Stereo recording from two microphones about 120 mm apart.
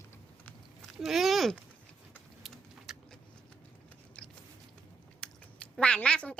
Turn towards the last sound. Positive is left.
turn(degrees=10)  # may be behind; listen again after turning